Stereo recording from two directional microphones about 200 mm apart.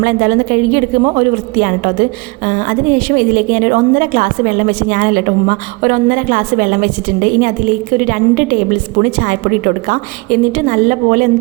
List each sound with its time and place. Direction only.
0.0 s a woman's voice: 45° right (ahead or behind)